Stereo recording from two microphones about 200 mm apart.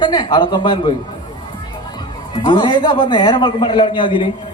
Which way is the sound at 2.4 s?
25° left (ahead or behind).